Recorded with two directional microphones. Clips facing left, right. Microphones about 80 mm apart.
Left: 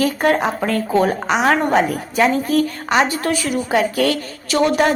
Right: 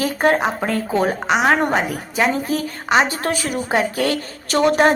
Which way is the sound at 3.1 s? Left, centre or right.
Right.